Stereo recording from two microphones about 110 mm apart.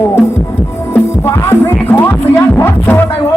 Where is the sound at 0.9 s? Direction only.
20° left (ahead or behind).